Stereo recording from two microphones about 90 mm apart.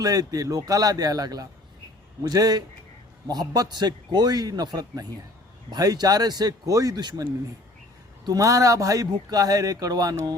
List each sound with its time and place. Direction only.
0.0 s a man's voice: 40° right (ahead or behind)